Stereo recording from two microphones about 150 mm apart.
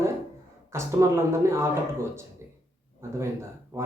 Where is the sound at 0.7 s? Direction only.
15° right (ahead or behind).